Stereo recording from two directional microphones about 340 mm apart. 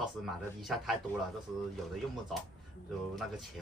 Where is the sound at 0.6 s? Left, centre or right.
Centre.